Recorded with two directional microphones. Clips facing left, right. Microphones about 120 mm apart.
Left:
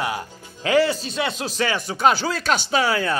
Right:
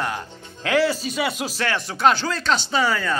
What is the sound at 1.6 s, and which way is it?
A man's voice, centre (ahead or behind).